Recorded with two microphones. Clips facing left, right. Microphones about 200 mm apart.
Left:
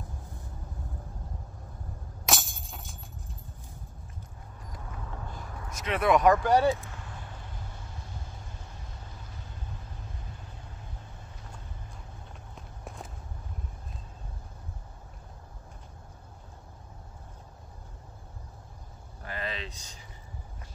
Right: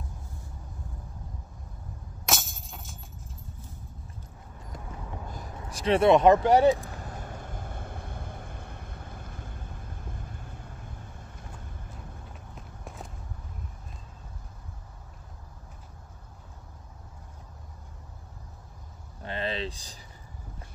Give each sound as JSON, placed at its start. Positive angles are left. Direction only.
{"t": 2.2, "sound": "music", "side_deg": 0}
{"t": 5.6, "sound": "speech", "side_deg": -30}
{"t": 6.8, "sound": "vehicle", "side_deg": -35}
{"t": 12.5, "sound": "walk", "side_deg": 0}
{"t": 19.2, "sound": "a sound", "side_deg": -30}